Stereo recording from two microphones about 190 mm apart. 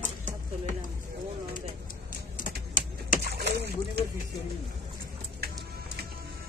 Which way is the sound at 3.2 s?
55° right (ahead or behind).